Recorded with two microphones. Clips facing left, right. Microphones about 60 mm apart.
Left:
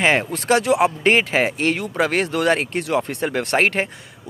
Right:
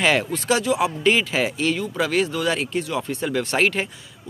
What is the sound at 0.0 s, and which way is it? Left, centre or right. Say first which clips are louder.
Speech: left 2 dB; left.